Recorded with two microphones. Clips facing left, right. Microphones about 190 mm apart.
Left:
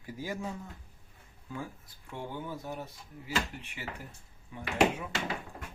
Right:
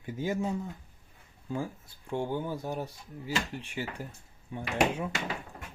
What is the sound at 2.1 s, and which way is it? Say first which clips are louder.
Speech: right 7 dB; 30° right (ahead or behind).